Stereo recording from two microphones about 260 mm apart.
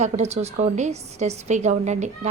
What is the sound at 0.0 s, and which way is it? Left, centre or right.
A woman's voice, right.